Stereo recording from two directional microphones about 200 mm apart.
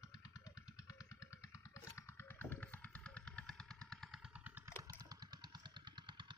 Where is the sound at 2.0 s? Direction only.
10° left (ahead or behind).